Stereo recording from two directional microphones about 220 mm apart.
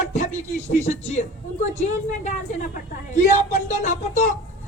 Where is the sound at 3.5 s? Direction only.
35° left (ahead or behind).